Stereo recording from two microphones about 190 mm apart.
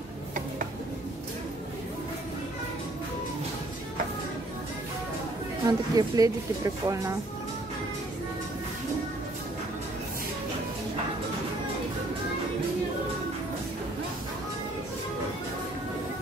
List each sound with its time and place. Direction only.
5.7 s speech: 20° right (ahead or behind)